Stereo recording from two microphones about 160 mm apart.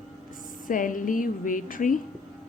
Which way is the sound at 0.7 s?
55° left (ahead or behind).